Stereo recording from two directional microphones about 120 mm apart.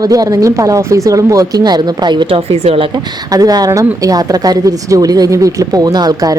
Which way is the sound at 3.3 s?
30° right (ahead or behind).